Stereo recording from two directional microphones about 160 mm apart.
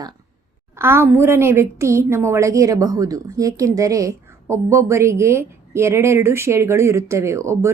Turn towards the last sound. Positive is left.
turn(degrees=-15)  # may be behind; listen again after turning